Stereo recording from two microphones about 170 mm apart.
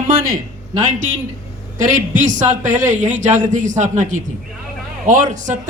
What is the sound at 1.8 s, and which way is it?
A man's voice, 50° right (ahead or behind).